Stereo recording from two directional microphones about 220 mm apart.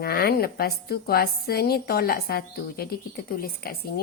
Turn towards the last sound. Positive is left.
turn(degrees=40)  # may be behind; listen again after turning